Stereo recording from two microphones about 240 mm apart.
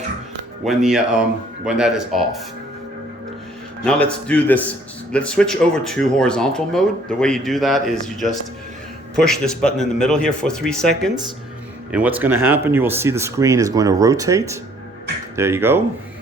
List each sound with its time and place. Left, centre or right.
0.6 s speech: centre
3.8 s speech: centre